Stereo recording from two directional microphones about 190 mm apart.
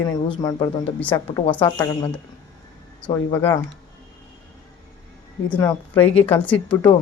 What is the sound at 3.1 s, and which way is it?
Speech, 15° left (ahead or behind).